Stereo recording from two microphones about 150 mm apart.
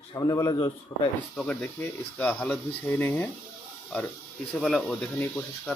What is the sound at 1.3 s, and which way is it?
Speech, 5° left (ahead or behind).